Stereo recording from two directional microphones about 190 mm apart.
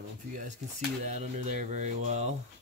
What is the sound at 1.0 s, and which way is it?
Speech, 40° right (ahead or behind).